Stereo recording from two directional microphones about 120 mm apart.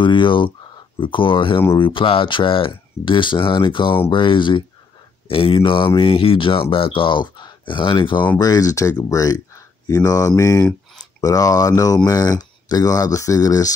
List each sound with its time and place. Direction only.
0.0 s speech: 45° left (ahead or behind)
8.4 s speech: 30° left (ahead or behind)